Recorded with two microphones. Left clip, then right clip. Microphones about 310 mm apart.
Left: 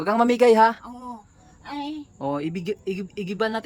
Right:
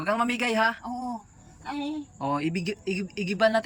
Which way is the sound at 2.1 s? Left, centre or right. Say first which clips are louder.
Left 1 dB; centre.